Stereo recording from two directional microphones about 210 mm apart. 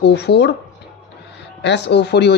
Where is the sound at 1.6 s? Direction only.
55° left (ahead or behind).